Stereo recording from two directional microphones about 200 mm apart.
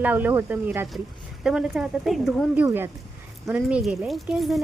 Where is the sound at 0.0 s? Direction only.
10° right (ahead or behind).